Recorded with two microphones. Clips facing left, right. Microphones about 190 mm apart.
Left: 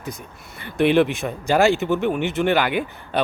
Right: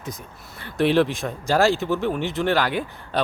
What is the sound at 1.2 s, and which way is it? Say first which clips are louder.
Speech: left 2 dB; centre (ahead or behind).